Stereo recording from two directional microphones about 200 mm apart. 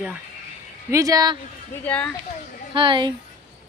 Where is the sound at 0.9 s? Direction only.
15° right (ahead or behind).